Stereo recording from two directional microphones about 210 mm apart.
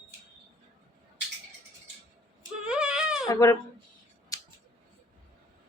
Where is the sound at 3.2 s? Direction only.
15° left (ahead or behind).